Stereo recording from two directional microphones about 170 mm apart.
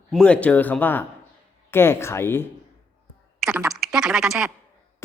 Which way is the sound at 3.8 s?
5° right (ahead or behind).